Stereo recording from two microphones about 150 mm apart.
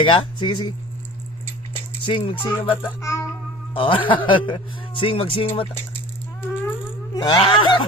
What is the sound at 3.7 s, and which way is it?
Speech, 35° left (ahead or behind).